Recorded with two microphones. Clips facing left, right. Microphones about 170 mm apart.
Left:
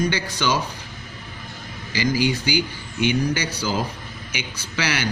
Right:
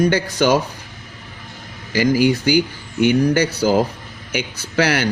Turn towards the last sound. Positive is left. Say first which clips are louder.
# right 8 dB
turn(degrees=-55)  # may be behind; listen again after turning